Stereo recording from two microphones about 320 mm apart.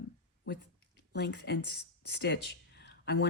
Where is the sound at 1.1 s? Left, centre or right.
Left.